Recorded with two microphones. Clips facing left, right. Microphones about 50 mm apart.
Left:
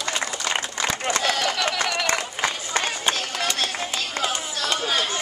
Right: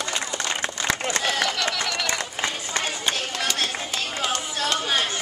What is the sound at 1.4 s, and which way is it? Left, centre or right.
Speech, centre.